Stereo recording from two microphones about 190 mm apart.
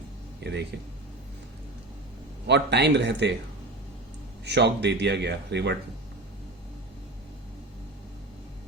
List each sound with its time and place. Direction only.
0.4 s speech: 65° right (ahead or behind)
2.5 s speech: 65° right (ahead or behind)
4.4 s speech: 65° right (ahead or behind)